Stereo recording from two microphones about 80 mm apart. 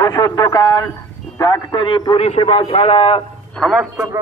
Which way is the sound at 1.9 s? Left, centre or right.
Left.